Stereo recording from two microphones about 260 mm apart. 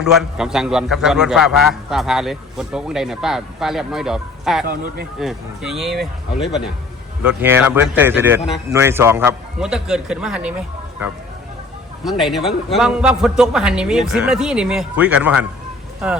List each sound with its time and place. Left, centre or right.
0.0 s a man's voice: centre
4.6 s speech: right
5.2 s a man's voice: centre
12.0 s a man's voice: centre